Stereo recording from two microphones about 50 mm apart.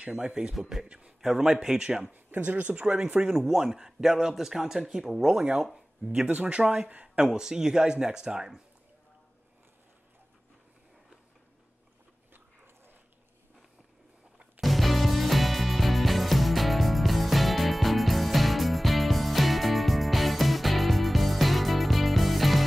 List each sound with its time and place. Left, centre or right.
0.0 s a man's voice: centre
2.1 s speech: right
3.3 s a man's voice: centre
6.1 s speech: right
6.9 s speech: right
7.2 s a man's voice: centre
14.6 s music: centre